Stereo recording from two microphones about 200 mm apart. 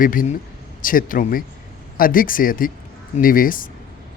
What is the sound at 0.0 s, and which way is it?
Speech, 45° left (ahead or behind).